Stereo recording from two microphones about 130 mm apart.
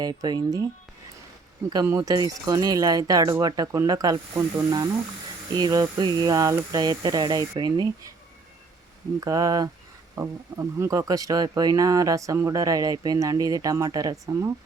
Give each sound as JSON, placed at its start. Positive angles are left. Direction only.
{"t": 0.0, "sound": "speech", "side_deg": -30}
{"t": 1.7, "sound": "speech", "side_deg": -25}
{"t": 9.2, "sound": "speech", "side_deg": -25}